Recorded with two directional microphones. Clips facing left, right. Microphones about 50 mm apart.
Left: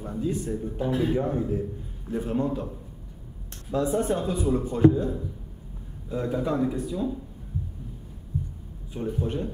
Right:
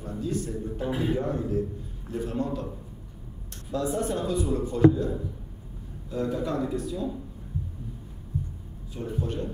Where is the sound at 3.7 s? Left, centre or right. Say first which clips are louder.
Left 3 dB; left.